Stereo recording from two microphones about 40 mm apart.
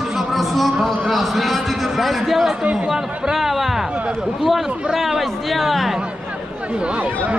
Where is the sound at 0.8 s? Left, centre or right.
Centre.